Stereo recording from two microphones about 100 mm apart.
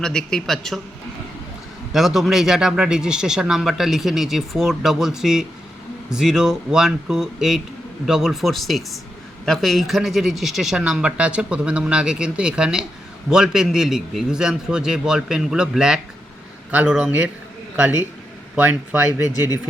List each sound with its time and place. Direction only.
0.0 s speech: 5° left (ahead or behind)
1.9 s speech: 5° right (ahead or behind)